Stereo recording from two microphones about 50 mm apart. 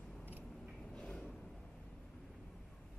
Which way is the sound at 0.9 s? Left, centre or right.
Centre.